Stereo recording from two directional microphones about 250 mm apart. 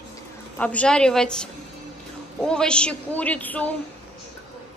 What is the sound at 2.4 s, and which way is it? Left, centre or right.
A woman's voice, centre.